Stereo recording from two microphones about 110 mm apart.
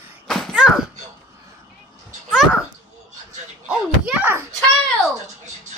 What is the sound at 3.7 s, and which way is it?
Bouncing, 5° right (ahead or behind).